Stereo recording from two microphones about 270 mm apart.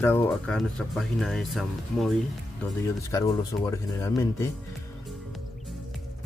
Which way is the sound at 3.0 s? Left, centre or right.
Centre.